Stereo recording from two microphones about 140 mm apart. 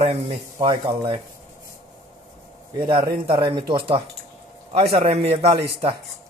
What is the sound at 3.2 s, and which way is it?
Speech, 35° right (ahead or behind).